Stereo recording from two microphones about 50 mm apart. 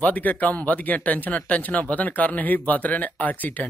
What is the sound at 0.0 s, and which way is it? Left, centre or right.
Speech, left.